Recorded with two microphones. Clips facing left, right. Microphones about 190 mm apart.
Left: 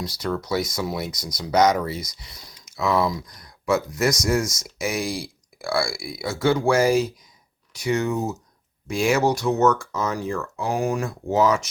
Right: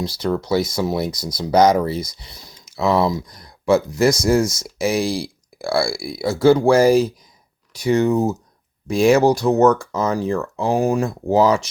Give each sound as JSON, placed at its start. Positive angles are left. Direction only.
{"t": 0.0, "sound": "speech", "side_deg": -30}